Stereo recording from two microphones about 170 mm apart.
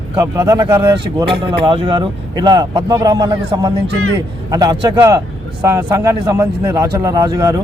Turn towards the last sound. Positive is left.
turn(degrees=-20)  # may be behind; listen again after turning